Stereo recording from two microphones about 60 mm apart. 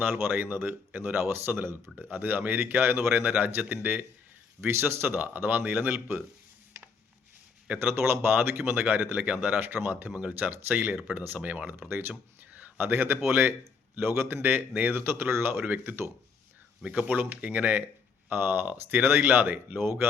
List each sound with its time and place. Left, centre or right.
0.0 s speech: right
5.7 s speech: right
7.8 s speech: right
11.3 s speech: right
11.9 s speech: right
16.8 s speech: right
19.8 s speech: right